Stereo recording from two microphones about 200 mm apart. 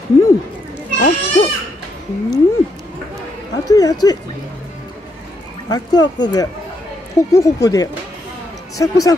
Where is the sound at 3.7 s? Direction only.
20° left (ahead or behind).